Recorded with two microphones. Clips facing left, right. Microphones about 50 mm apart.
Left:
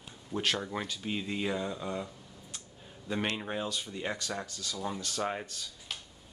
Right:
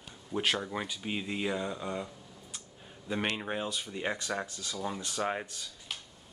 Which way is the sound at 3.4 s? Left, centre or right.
Centre.